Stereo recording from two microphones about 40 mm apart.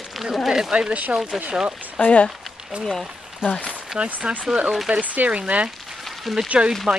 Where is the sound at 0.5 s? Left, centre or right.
Centre.